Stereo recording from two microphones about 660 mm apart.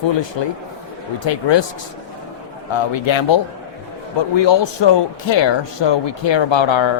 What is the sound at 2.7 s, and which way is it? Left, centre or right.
A man's voice, left.